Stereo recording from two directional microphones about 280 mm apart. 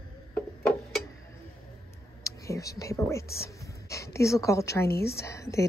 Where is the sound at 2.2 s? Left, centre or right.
Centre.